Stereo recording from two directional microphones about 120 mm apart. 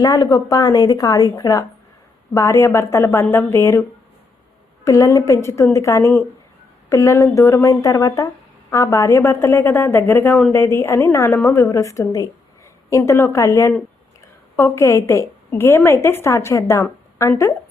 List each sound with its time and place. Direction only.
0.0 s a woman's voice: 30° left (ahead or behind)
4.9 s a woman's voice: 25° left (ahead or behind)